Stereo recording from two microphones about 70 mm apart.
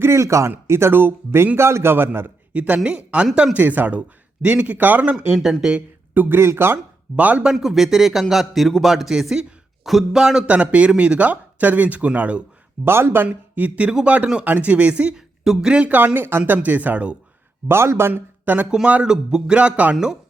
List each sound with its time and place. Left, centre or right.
0.0 s speech: right
2.5 s a man's voice: centre
3.6 s speech: right
5.3 s a man's voice: centre
6.1 s speech: right
7.2 s speech: right
7.5 s a man's voice: centre; by 12.4 s right
12.8 s speech: right
13.2 s speech: centre
17.7 s speech: right
18.1 s a man's voice: right